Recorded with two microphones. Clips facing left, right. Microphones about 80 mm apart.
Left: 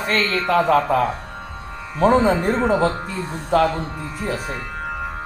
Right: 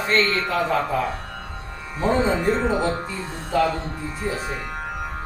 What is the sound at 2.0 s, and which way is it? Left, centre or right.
Speech, left.